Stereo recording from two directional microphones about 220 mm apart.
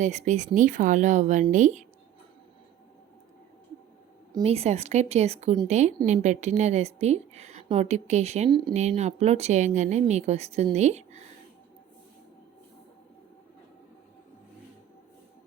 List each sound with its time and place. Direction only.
0.0 s a woman's voice: 35° right (ahead or behind)
4.3 s a woman's voice: 25° right (ahead or behind)